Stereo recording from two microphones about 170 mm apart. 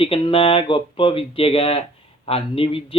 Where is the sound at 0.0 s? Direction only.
30° left (ahead or behind).